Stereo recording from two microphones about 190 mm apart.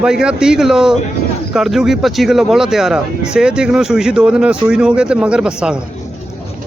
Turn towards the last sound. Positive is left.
turn(degrees=-5)  # may be behind; listen again after turning